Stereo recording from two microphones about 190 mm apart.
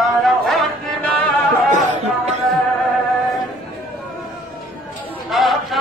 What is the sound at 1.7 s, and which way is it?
Music, 40° right (ahead or behind).